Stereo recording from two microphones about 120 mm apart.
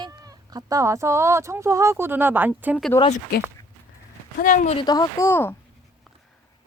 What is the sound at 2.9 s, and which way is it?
Speech, 20° left (ahead or behind).